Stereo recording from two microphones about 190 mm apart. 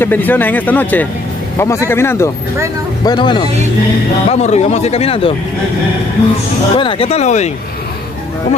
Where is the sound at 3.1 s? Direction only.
25° left (ahead or behind).